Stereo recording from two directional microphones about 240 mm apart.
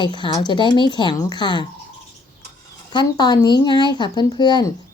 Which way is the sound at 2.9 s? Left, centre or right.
Centre.